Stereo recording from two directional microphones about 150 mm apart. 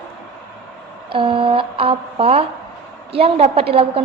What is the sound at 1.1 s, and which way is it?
Speech, 35° right (ahead or behind).